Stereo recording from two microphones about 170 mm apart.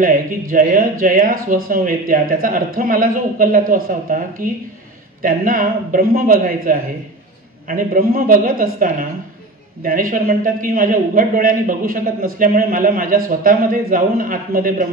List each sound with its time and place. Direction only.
0.0 s a man's voice: 55° right (ahead or behind)